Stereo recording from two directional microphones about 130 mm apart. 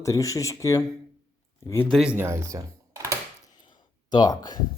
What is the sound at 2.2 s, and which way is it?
Speech, 25° right (ahead or behind).